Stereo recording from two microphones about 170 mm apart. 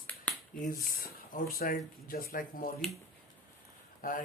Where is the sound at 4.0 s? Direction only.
55° left (ahead or behind).